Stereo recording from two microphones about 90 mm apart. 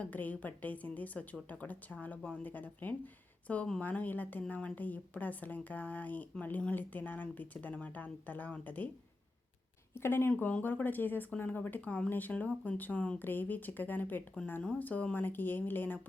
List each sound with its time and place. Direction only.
0.0 s speech: 20° left (ahead or behind)
10.0 s speech: 25° left (ahead or behind)